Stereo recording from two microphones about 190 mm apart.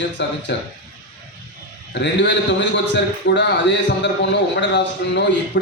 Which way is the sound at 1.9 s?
70° left (ahead or behind).